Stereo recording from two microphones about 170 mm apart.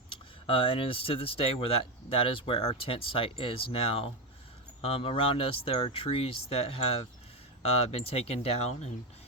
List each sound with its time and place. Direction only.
0.1 s speech: 30° left (ahead or behind)